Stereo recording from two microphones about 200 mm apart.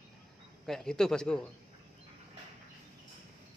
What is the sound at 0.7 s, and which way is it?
Speech, 5° left (ahead or behind).